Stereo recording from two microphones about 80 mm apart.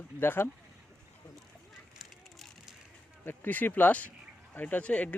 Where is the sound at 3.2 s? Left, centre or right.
Left.